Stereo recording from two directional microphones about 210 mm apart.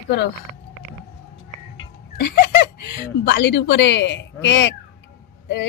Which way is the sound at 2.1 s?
50° left (ahead or behind).